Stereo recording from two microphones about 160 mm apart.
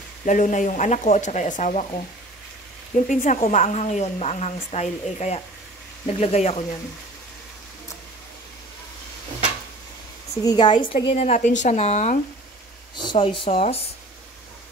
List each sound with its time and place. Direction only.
0.2 s a woman's voice: 55° left (ahead or behind)
3.1 s a woman's voice: 50° left (ahead or behind)
10.3 s a woman's voice: 25° left (ahead or behind); by 12.2 s 45° left (ahead or behind)
12.9 s a woman's voice: 30° left (ahead or behind)